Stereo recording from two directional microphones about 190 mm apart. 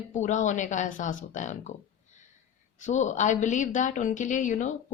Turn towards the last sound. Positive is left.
turn(degrees=40)  # may be behind; listen again after turning